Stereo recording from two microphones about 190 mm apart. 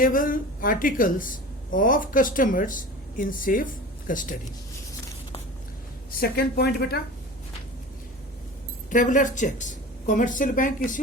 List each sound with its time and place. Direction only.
0.0 s a woman's voice: 45° left (ahead or behind)
6.1 s a woman's voice: 50° left (ahead or behind)
8.9 s a woman's voice: 40° left (ahead or behind)